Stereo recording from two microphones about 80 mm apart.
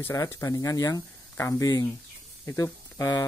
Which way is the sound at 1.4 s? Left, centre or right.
Left.